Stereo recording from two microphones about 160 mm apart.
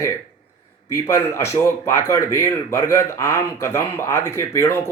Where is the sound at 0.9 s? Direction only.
20° left (ahead or behind).